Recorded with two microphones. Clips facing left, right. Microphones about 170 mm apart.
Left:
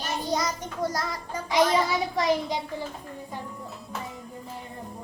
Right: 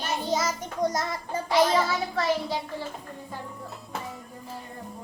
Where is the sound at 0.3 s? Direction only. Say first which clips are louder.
Even; 5° right (ahead or behind).